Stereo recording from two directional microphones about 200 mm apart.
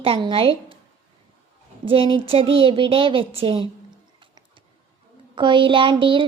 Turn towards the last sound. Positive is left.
turn(degrees=-25)  # may be behind; listen again after turning